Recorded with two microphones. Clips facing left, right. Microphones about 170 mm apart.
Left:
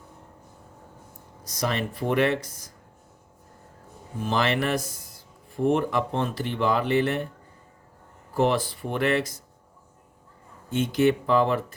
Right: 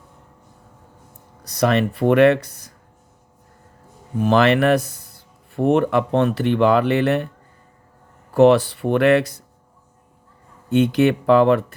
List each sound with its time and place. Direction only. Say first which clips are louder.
1.5 s speech: right 10 dB; 65° right (ahead or behind)
4.2 s speech: right 9 dB; 65° right (ahead or behind)
8.3 s speech: right 10 dB; 70° right (ahead or behind)
10.7 s speech: right 6 dB; 65° right (ahead or behind)